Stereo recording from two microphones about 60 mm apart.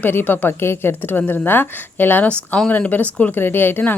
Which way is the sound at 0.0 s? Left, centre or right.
Left.